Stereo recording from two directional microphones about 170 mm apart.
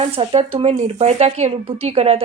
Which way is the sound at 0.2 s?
35° right (ahead or behind).